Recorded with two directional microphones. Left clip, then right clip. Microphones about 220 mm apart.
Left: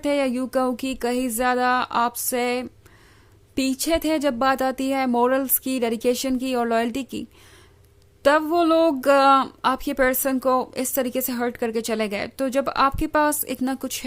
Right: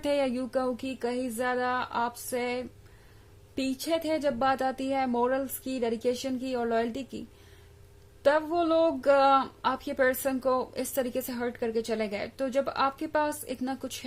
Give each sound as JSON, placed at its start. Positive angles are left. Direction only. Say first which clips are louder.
{"t": 0.0, "sound": "speech", "louder": "left 5 dB", "side_deg": 25}